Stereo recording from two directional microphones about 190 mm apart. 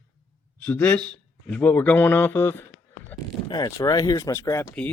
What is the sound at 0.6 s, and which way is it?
Speech, 10° left (ahead or behind).